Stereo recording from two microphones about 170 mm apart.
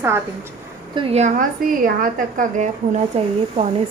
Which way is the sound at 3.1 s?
35° right (ahead or behind).